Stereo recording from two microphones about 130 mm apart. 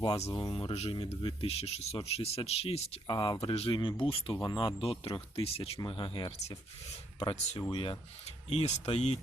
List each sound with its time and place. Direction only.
0.3 s speech: 40° left (ahead or behind)
3.1 s speech: 35° left (ahead or behind)
8.4 s speech: 55° left (ahead or behind)